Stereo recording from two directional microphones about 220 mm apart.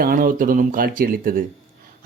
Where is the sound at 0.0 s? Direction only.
40° right (ahead or behind).